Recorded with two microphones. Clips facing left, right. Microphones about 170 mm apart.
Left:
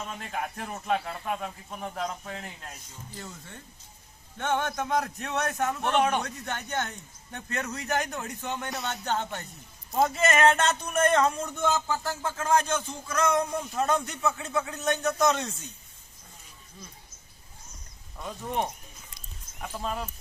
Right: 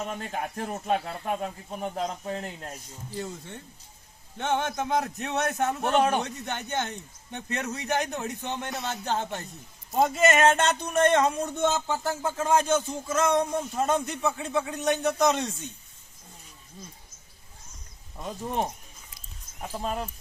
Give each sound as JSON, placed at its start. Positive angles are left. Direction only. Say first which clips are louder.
{"t": 0.0, "sound": "speech", "louder": "right 2 dB", "side_deg": -35}
{"t": 4.4, "sound": "speech", "louder": "right 1 dB", "side_deg": -20}
{"t": 5.8, "sound": "speech", "louder": "right 2 dB", "side_deg": -40}
{"t": 6.1, "sound": "speech", "louder": "right 2 dB", "side_deg": -20}
{"t": 8.7, "sound": "speech", "louder": "right 1 dB", "side_deg": 0}
{"t": 9.9, "sound": "speech", "louder": "right 2 dB", "side_deg": -20}
{"t": 18.2, "sound": "speech", "louder": "right 1 dB", "side_deg": -30}